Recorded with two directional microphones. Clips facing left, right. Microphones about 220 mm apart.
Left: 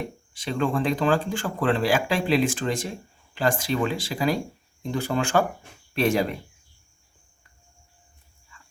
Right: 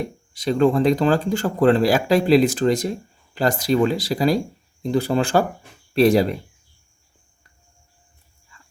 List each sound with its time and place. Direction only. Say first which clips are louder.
0.0 s speech: right 7 dB; 40° right (ahead or behind)